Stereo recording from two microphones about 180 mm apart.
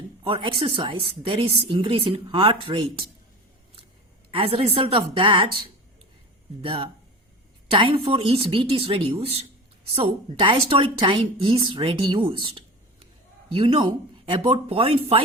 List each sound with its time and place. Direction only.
0.3 s a woman's voice: 30° right (ahead or behind)
4.3 s a woman's voice: 30° right (ahead or behind)
6.6 s a woman's voice: 30° right (ahead or behind)
12.3 s a sound: 30° right (ahead or behind)
13.5 s a woman's voice: 30° right (ahead or behind)